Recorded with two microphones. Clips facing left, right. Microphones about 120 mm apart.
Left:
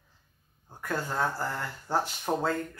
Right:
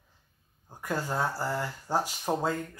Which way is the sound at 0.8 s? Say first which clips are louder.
Even; 10° right (ahead or behind).